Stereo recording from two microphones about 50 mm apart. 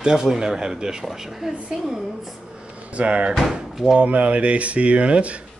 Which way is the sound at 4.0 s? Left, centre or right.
Right.